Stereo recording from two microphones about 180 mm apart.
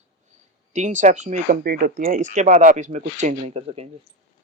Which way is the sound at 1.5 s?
55° right (ahead or behind).